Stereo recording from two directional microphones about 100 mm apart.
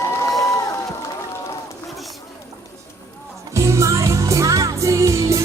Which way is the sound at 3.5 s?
30° right (ahead or behind).